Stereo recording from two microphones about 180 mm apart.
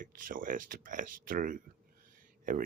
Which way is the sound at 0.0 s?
50° right (ahead or behind).